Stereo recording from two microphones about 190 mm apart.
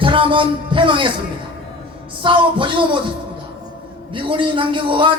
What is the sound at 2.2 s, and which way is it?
Speech, 25° right (ahead or behind).